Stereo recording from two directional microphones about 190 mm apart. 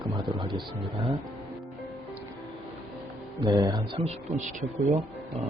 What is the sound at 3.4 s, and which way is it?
A man's voice, 20° right (ahead or behind).